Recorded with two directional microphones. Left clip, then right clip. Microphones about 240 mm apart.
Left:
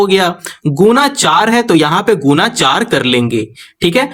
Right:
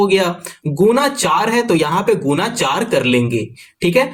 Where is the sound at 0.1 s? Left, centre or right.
Left.